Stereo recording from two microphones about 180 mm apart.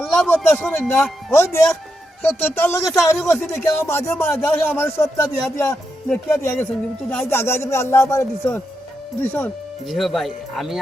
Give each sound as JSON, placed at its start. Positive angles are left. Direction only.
{"t": 0.0, "sound": "a sound", "side_deg": 0}
{"t": 0.3, "sound": "a man's voice", "side_deg": 10}
{"t": 3.3, "sound": "speech", "side_deg": 0}
{"t": 3.7, "sound": "a man's voice", "side_deg": 15}